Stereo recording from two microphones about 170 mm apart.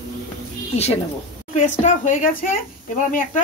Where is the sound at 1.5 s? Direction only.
45° left (ahead or behind).